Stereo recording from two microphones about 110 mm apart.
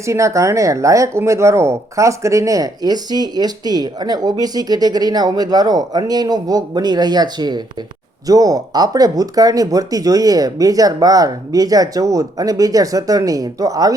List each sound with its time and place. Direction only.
0.0 s speech: 25° right (ahead or behind)